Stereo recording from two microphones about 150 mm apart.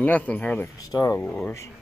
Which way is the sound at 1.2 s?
10° left (ahead or behind).